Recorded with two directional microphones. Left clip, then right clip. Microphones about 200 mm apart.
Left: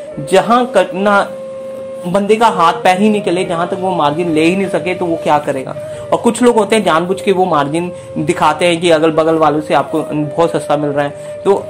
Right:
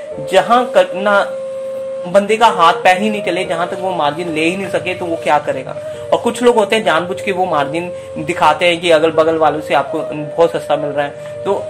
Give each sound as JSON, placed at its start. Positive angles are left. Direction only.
{"t": 0.3, "sound": "a woman's voice", "side_deg": 25}